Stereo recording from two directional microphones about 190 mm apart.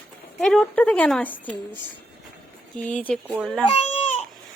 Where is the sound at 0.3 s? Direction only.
5° left (ahead or behind).